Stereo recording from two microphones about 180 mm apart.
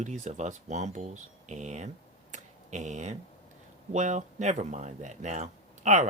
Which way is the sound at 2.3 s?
40° right (ahead or behind).